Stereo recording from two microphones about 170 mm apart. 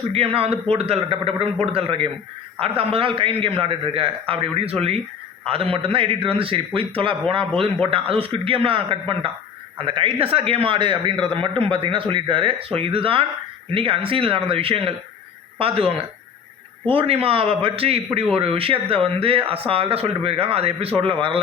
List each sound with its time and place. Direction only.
0.1 s a man's voice: 35° right (ahead or behind)